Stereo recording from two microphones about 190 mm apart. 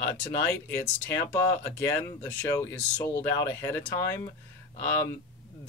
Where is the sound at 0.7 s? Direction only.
10° left (ahead or behind).